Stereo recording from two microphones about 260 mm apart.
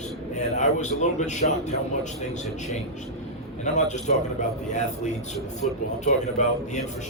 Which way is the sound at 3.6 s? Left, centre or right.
Left.